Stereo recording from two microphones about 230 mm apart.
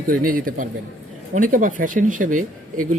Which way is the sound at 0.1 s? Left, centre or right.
Right.